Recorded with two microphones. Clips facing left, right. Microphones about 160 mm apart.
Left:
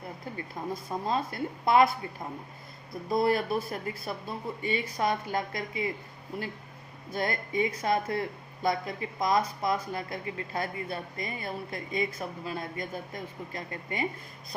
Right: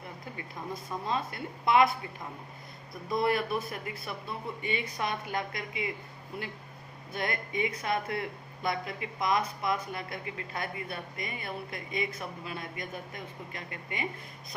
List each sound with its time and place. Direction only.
0.9 s a woman's voice: 35° left (ahead or behind)
3.1 s a woman's voice: 35° left (ahead or behind)
7.1 s a woman's voice: 35° left (ahead or behind)